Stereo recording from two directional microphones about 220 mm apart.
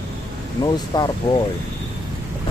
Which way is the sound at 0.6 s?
20° left (ahead or behind).